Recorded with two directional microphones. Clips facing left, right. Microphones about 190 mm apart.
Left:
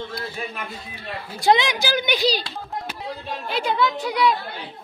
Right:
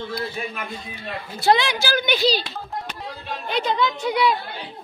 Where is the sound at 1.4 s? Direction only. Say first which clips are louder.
Even; 15° left (ahead or behind).